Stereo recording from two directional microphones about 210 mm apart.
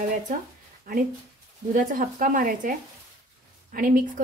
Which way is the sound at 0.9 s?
40° right (ahead or behind).